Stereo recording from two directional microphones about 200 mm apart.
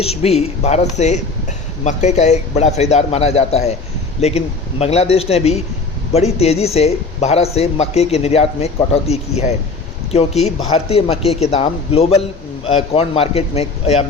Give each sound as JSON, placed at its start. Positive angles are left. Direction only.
{"t": 0.0, "sound": "a man's voice", "side_deg": 30}